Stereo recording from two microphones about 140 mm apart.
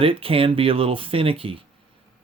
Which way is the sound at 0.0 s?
40° right (ahead or behind).